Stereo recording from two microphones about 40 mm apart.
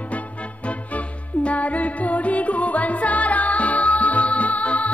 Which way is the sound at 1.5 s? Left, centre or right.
Left.